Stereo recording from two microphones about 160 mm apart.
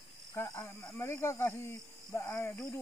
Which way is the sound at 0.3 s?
20° left (ahead or behind).